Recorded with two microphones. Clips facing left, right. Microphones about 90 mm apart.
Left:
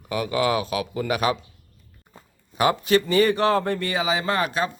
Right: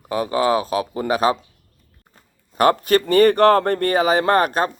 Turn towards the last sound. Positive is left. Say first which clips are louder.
# right 6 dB
turn(degrees=-50)  # may be behind; listen again after turning